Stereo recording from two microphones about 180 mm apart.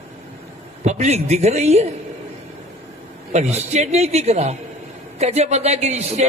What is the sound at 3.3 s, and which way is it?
Speech, 40° right (ahead or behind).